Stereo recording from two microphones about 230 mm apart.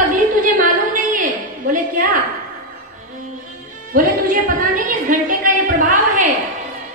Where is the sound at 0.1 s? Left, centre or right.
Right.